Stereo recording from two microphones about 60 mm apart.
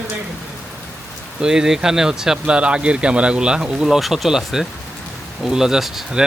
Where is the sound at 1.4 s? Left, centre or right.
Centre.